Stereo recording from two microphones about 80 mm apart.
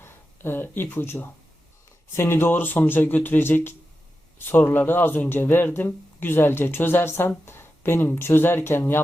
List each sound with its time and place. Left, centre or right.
0.0 s speech: left